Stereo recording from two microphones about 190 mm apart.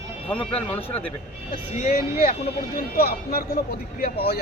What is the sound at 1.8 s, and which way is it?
Speech, 50° left (ahead or behind).